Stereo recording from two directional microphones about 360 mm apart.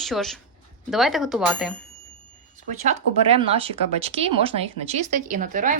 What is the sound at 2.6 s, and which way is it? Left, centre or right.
Speech, centre.